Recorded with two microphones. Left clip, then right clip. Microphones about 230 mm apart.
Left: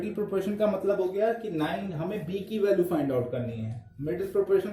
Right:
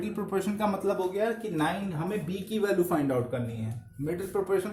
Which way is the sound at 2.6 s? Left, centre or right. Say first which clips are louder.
Left 2 dB; centre.